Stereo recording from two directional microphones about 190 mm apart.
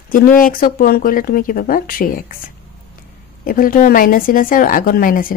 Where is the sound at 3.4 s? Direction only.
50° left (ahead or behind).